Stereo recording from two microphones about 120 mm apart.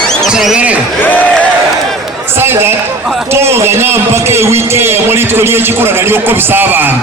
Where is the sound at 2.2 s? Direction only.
20° right (ahead or behind).